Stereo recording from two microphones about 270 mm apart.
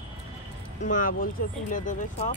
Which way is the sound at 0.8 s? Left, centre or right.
Left.